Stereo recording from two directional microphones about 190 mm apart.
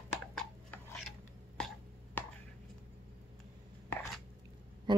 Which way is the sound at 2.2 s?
10° left (ahead or behind).